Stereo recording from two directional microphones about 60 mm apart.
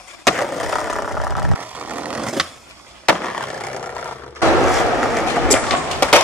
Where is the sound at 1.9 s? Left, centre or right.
Right.